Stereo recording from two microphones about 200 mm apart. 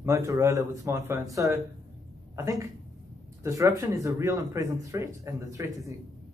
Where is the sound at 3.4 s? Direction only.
15° right (ahead or behind).